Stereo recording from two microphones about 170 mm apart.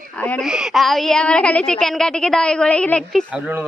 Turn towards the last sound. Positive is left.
turn(degrees=-10)  # may be behind; listen again after turning